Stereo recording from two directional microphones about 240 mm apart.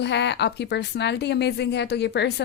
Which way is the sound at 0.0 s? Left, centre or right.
Left.